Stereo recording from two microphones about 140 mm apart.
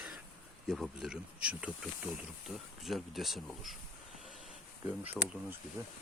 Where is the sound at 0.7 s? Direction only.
5° right (ahead or behind).